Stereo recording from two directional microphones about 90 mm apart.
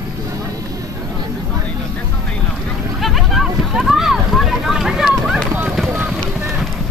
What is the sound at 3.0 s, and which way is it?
Boat, centre (ahead or behind).